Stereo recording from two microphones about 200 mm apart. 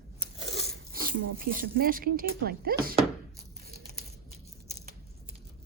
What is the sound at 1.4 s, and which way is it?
Speech, 45° right (ahead or behind).